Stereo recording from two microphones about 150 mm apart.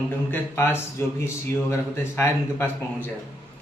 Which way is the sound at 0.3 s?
15° left (ahead or behind).